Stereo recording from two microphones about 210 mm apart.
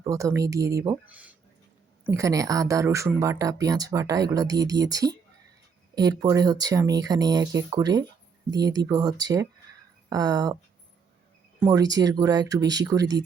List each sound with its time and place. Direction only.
0.0 s speech: 15° right (ahead or behind)
11.6 s speech: 15° right (ahead or behind)